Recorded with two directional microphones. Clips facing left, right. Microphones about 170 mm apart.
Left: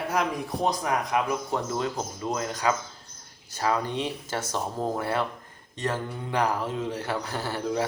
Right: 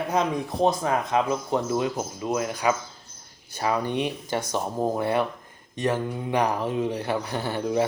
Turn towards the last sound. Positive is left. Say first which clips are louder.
# right 3 dB
turn(degrees=-20)  # may be behind; listen again after turning